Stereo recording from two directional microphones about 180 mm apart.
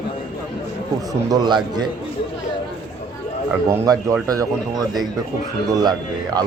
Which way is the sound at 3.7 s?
20° right (ahead or behind).